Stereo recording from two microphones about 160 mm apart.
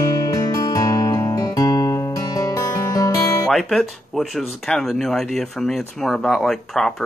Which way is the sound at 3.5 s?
Centre (ahead or behind).